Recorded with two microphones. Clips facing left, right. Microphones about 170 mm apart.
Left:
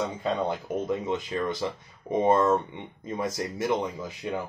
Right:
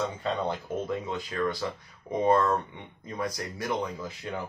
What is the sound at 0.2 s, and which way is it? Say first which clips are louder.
Speech: left 2 dB; 15° left (ahead or behind).